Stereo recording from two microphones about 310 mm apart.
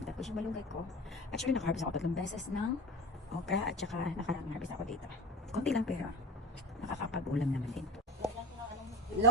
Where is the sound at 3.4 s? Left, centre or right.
Centre.